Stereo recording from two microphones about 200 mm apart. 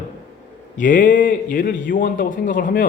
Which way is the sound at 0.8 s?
40° left (ahead or behind).